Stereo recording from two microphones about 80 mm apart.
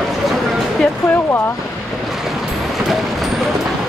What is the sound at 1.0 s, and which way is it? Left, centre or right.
Speech, left.